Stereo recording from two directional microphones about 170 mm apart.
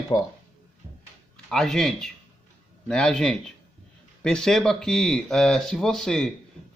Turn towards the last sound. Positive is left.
turn(degrees=0)  # may be behind; listen again after turning